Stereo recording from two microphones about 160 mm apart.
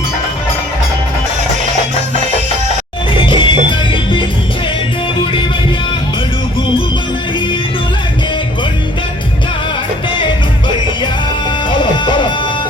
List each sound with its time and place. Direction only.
3.2 s music: 30° left (ahead or behind)
11.7 s music: 30° left (ahead or behind)